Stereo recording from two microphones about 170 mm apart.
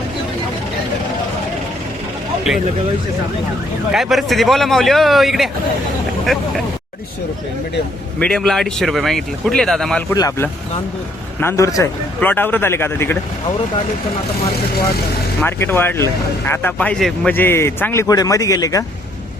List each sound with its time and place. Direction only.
3.9 s speech: centre (ahead or behind)
8.2 s speech: 5° left (ahead or behind)
10.1 s a man's voice: 15° left (ahead or behind)
15.4 s a man's voice: 10° left (ahead or behind)